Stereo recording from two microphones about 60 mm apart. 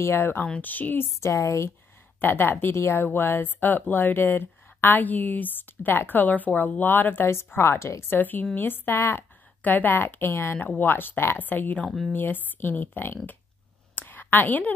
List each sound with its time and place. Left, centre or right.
0.0 s speech: left
0.6 s speech: left
1.3 s speech: left
2.1 s speech: left
8.1 s speech: left
9.6 s speech: left
13.9 s a sound: left